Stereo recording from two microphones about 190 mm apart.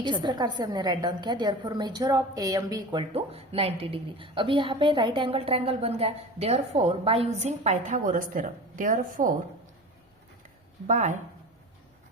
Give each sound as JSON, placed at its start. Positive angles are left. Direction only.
{"t": 0.0, "sound": "a woman's voice", "side_deg": -25}
{"t": 10.8, "sound": "speech", "side_deg": -40}